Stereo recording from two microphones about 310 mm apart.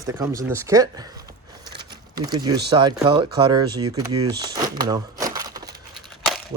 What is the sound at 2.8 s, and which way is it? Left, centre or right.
Speech, centre.